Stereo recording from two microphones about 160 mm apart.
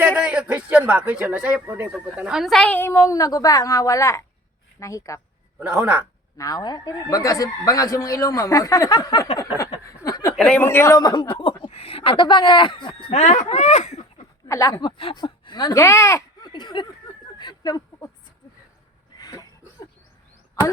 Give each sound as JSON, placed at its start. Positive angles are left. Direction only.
{"t": 0.0, "sound": "speech", "side_deg": -10}
{"t": 5.5, "sound": "speech", "side_deg": -10}
{"t": 6.3, "sound": "speech", "side_deg": 20}
{"t": 10.0, "sound": "a sound", "side_deg": 20}
{"t": 10.3, "sound": "speech", "side_deg": 5}
{"t": 13.1, "sound": "speech", "side_deg": 45}
{"t": 14.4, "sound": "speech", "side_deg": 20}
{"t": 17.3, "sound": "a sound", "side_deg": 30}
{"t": 19.1, "sound": "cough", "side_deg": 25}